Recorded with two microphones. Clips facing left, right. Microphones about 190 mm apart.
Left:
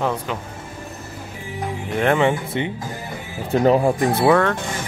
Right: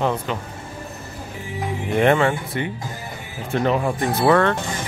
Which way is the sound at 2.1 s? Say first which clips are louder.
Left 2 dB; 20° left (ahead or behind).